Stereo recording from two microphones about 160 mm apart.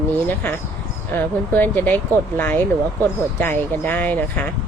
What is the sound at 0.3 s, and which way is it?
Speech, 10° left (ahead or behind).